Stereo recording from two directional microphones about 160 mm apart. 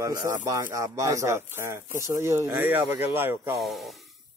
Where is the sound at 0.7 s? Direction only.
20° right (ahead or behind).